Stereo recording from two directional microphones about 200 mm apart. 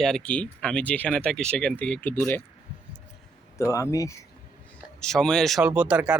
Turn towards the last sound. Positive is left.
turn(degrees=-5)  # may be behind; listen again after turning